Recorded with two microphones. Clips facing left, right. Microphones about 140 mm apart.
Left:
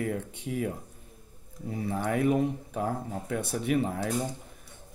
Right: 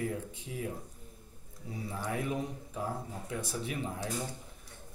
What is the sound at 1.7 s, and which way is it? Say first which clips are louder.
Speech: left 7 dB; 65° left (ahead or behind).